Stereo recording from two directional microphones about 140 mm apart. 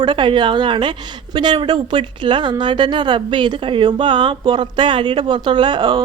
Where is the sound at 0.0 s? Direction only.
35° right (ahead or behind).